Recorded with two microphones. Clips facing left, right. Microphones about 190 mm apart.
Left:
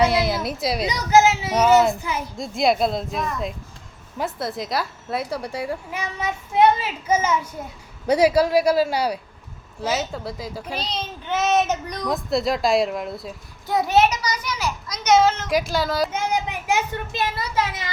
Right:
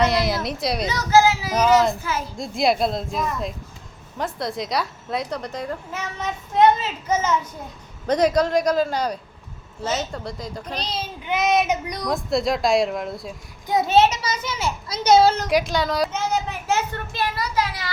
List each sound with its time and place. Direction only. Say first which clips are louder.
0.0 s speech: left 1 dB; centre (ahead or behind)
0.9 s a child's voice: even; 15° left (ahead or behind)
2.4 s a woman's voice: left 1 dB; centre (ahead or behind)
11.3 s speech: even; 10° right (ahead or behind)
12.0 s speech: even; centre (ahead or behind)
13.7 s a child's voice: right 1 dB; 20° right (ahead or behind)
15.4 s speech: right 1 dB; centre (ahead or behind)
16.3 s speech: even; 15° left (ahead or behind)